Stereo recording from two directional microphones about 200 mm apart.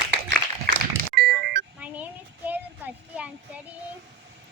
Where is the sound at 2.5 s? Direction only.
5° right (ahead or behind).